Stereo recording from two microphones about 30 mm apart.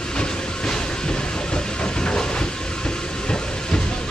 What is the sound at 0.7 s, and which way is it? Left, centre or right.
Train, left.